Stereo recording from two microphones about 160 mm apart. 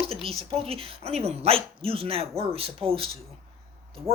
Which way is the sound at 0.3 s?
35° right (ahead or behind).